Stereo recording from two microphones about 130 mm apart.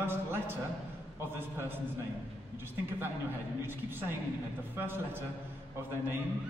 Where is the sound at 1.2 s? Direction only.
15° right (ahead or behind).